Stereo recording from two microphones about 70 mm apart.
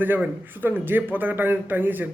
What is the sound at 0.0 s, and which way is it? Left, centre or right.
A man's voice, right.